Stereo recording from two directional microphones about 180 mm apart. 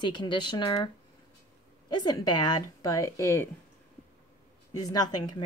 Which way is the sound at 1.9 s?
25° left (ahead or behind).